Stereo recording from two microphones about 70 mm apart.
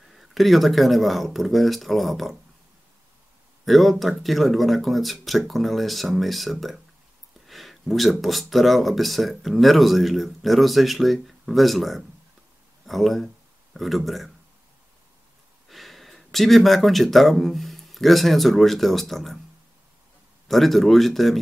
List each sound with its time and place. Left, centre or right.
0.1 s speech: centre
3.6 s speech: centre
15.7 s speech: centre
20.4 s speech: centre